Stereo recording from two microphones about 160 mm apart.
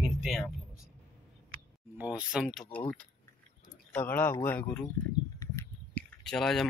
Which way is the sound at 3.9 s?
10° left (ahead or behind).